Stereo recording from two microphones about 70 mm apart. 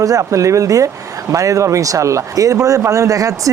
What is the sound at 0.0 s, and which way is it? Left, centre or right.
Speech, right.